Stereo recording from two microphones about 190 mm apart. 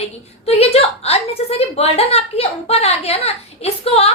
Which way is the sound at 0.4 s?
30° left (ahead or behind).